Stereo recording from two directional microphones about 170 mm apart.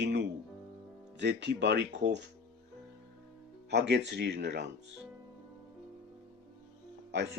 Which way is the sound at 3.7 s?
80° right.